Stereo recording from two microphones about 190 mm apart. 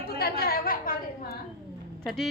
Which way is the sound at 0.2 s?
55° left (ahead or behind).